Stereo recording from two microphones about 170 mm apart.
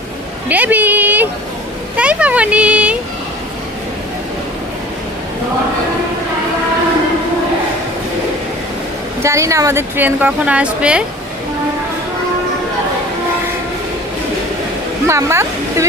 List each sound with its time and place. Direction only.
0.4 s a sound: 10° right (ahead or behind)
9.2 s a woman's voice: 15° right (ahead or behind)
15.0 s speech: 15° right (ahead or behind)